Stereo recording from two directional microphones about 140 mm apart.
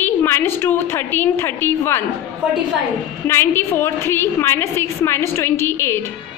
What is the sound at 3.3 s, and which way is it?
A woman's voice, 15° left (ahead or behind).